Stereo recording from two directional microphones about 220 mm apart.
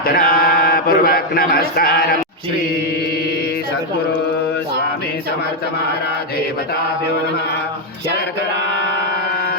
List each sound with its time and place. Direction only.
0.0 s mantra: 40° left (ahead or behind)